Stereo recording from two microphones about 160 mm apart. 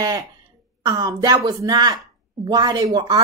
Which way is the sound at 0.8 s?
25° right (ahead or behind).